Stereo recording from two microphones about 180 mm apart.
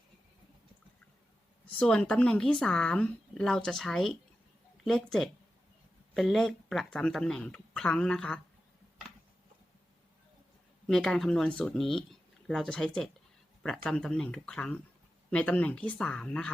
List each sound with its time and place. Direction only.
1.8 s speech: 5° left (ahead or behind)
10.8 s speech: centre (ahead or behind)